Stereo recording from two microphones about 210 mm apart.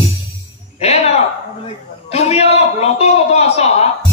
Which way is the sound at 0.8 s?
30° left (ahead or behind).